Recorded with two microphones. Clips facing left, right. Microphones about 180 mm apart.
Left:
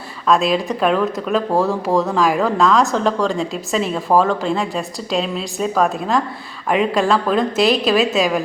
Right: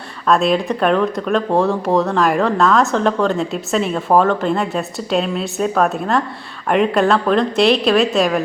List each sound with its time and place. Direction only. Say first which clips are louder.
0.3 s speech: right 1 dB; centre (ahead or behind)